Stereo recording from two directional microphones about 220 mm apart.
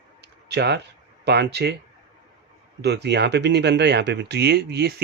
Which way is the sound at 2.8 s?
50° right (ahead or behind).